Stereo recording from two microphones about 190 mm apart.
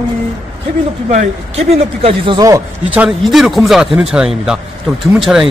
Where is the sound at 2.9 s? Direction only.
Centre (ahead or behind).